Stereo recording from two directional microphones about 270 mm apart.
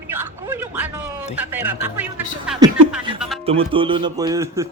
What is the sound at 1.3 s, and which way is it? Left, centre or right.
Speech, centre.